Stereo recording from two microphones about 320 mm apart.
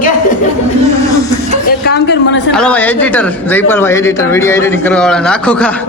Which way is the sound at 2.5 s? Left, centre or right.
Centre.